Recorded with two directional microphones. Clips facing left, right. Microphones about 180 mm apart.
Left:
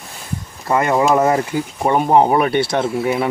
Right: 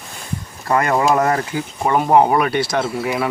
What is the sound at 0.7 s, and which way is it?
Speech, 20° left (ahead or behind).